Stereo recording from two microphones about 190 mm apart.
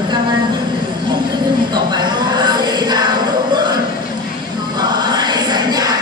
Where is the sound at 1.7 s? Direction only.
20° right (ahead or behind).